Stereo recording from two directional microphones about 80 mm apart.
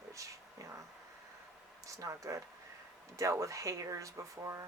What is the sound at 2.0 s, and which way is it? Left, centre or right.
Speech, right.